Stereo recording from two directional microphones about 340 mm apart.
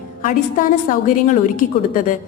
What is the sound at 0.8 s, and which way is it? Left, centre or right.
Speech, left.